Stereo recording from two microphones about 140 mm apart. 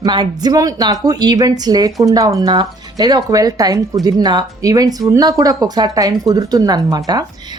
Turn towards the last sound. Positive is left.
turn(degrees=-30)  # may be behind; listen again after turning